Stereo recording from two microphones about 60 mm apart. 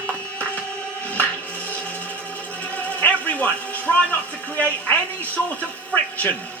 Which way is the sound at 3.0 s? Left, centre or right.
Left.